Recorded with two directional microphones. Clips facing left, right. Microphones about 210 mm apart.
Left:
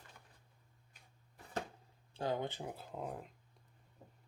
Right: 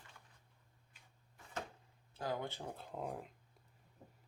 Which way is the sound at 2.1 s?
25° left (ahead or behind).